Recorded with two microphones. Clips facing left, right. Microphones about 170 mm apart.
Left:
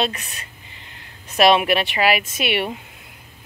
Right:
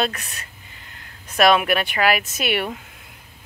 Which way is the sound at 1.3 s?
25° left (ahead or behind).